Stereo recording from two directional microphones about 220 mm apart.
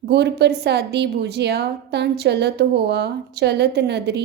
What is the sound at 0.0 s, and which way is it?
A woman's voice, 50° right (ahead or behind).